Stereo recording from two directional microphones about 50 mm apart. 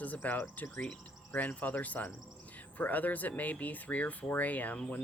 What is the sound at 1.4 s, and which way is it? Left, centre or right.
Speech, left.